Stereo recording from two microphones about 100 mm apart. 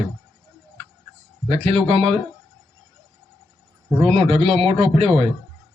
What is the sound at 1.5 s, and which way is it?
Speech, 85° right.